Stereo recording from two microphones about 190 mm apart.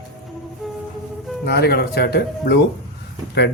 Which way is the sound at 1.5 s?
60° left (ahead or behind).